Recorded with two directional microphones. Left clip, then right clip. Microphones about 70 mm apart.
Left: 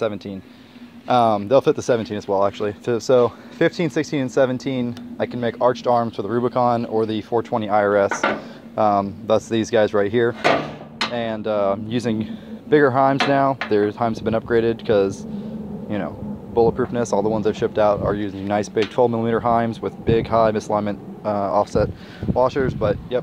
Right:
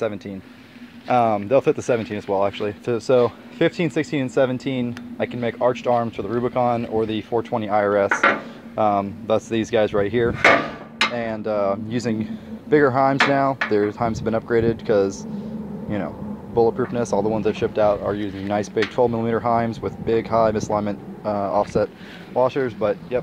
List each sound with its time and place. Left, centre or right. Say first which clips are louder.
1.0 s speech: left 2 dB; left; by 4.0 s centre
4.2 s speech: left 2 dB; left
16.5 s speech: left 1 dB; left
21.2 s speech: left 2 dB; left; by 23.2 s centre